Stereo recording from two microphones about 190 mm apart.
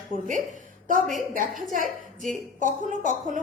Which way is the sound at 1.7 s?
45° right (ahead or behind).